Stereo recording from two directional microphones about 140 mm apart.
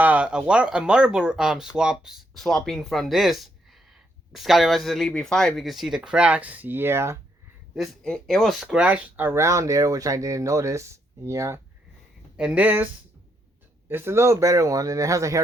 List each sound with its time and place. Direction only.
0.0 s speech: 10° right (ahead or behind)
7.8 s speech: 5° left (ahead or behind); by 11.6 s 20° right (ahead or behind)
12.4 s speech: 10° right (ahead or behind)